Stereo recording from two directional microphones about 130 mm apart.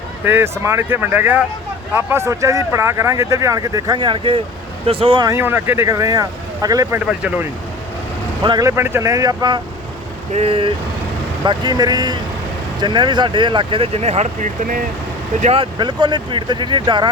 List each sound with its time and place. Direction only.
0.3 s speech: 20° right (ahead or behind); by 5.2 s 45° right (ahead or behind)
5.2 s speech: 20° right (ahead or behind)
7.1 s speech: 10° right (ahead or behind)
8.4 s speech: 30° right (ahead or behind)
8.7 s speech: 20° right (ahead or behind)
10.3 s speech: 50° right (ahead or behind)
11.4 s speech: 35° right (ahead or behind); by 14.8 s 65° right (ahead or behind)
15.5 s speech: 35° right (ahead or behind)